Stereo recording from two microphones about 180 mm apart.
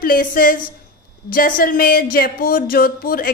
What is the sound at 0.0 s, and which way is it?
A woman's voice, 50° left (ahead or behind).